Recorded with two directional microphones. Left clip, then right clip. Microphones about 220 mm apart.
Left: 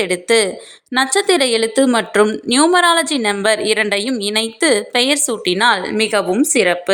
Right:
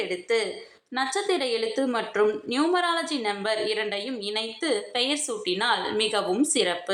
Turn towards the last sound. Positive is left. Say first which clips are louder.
# left 10 dB
turn(degrees=40)  # may be behind; listen again after turning